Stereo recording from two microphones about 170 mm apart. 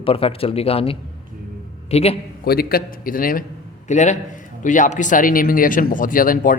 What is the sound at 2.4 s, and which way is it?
A man's voice, 65° left (ahead or behind).